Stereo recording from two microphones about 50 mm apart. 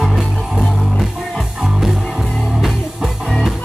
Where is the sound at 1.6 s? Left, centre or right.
Centre.